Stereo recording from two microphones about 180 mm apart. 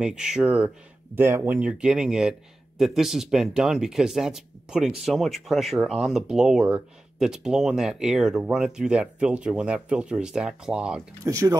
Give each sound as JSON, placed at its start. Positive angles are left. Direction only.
{"t": 0.0, "sound": "speech", "side_deg": -5}
{"t": 11.2, "sound": "speech", "side_deg": -20}